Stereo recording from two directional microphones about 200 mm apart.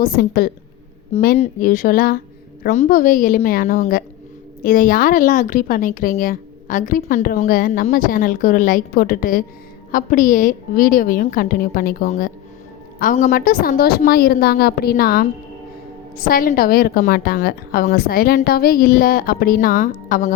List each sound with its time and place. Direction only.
0.0 s a woman's voice: 50° left (ahead or behind)
12.0 s a woman's voice: 35° left (ahead or behind)